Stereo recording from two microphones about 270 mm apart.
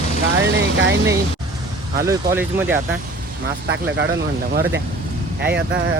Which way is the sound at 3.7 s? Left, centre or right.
Right.